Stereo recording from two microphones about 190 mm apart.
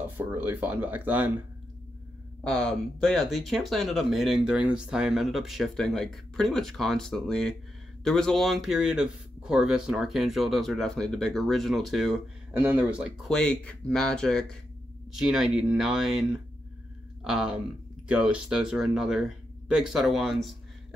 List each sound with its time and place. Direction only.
0.2 s speech: 10° right (ahead or behind)
2.4 s speech: 5° left (ahead or behind)